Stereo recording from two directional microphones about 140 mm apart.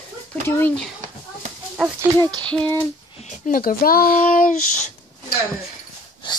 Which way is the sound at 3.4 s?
85° left.